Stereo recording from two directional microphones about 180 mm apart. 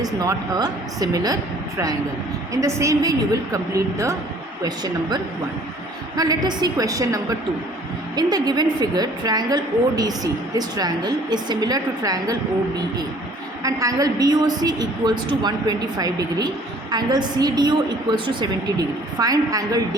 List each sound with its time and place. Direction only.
0.0 s a woman's voice: 20° right (ahead or behind)
2.5 s a woman's voice: 15° right (ahead or behind)
4.6 s a woman's voice: 25° right (ahead or behind)
13.6 s a woman's voice: 20° right (ahead or behind)